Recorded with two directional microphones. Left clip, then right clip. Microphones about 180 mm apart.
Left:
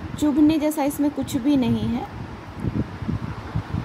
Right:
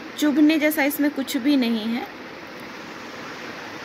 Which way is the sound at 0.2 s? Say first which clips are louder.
Right 1 dB; 15° left (ahead or behind).